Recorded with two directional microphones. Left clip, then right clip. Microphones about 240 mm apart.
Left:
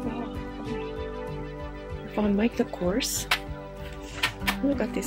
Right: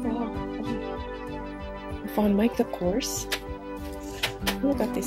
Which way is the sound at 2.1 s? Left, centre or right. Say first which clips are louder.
Right 2 dB; centre.